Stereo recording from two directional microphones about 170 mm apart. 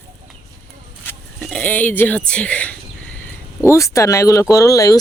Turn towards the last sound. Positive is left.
turn(degrees=20)  # may be behind; listen again after turning